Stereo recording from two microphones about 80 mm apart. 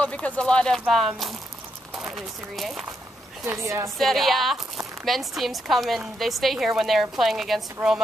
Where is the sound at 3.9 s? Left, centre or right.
Centre.